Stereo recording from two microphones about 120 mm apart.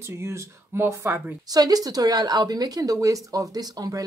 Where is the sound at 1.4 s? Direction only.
30° right (ahead or behind).